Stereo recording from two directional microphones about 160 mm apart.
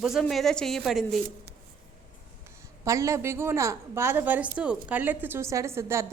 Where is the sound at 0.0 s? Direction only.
Centre (ahead or behind).